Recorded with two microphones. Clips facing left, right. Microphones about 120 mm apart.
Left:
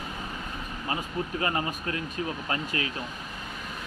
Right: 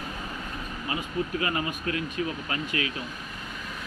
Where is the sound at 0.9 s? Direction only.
35° left (ahead or behind).